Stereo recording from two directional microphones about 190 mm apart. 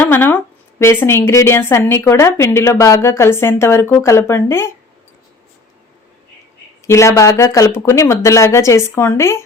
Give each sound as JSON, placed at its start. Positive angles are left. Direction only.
{"t": 0.0, "sound": "a woman's voice", "side_deg": 10}
{"t": 6.8, "sound": "a woman's voice", "side_deg": 15}